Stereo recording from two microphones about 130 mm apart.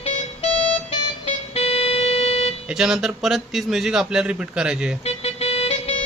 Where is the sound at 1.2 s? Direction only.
50° left (ahead or behind).